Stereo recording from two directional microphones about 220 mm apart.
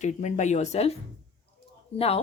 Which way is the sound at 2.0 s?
25° left (ahead or behind).